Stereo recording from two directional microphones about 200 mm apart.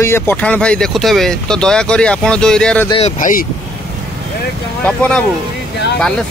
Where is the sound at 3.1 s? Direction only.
40° left (ahead or behind).